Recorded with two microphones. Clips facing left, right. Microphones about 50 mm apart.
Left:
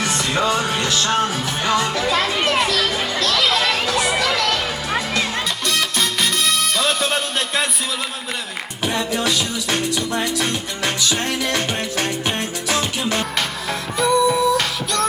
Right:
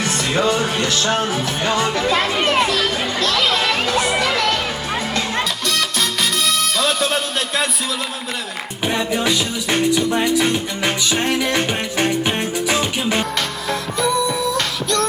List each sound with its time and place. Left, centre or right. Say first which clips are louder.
0.0 s music: right 1 dB; centre
1.0 s music: even; centre
2.0 s a child's voice: right 1 dB; right
5.6 s music: even; centre
8.8 s music: right 2 dB; right
13.7 s music: left 1 dB; centre